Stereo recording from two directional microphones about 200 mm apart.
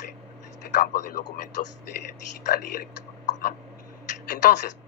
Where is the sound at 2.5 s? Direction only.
50° left (ahead or behind).